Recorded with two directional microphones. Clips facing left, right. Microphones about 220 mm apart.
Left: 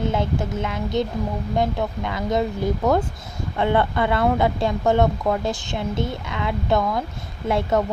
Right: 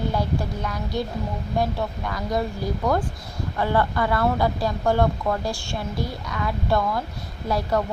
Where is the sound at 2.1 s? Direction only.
20° left (ahead or behind).